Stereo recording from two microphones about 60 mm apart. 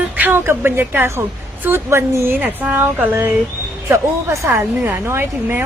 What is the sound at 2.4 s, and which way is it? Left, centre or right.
Speech, right.